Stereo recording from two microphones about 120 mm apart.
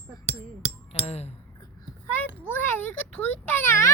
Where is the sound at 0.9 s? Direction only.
60° left (ahead or behind).